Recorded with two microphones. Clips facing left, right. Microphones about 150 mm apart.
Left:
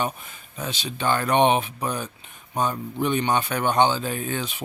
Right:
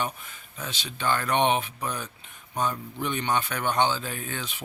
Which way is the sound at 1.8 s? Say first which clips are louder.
Left 4 dB; 35° left (ahead or behind).